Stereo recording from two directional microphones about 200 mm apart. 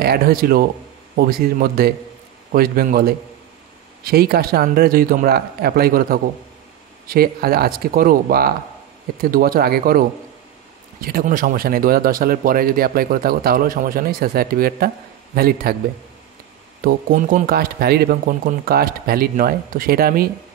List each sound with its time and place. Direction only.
0.0 s speech: 50° right (ahead or behind)
16.8 s speech: 45° right (ahead or behind)